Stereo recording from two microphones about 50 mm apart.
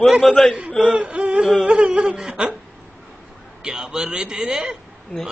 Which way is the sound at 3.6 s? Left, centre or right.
Centre.